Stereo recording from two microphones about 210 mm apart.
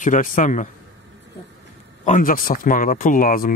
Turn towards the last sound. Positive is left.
turn(degrees=40)  # may be behind; listen again after turning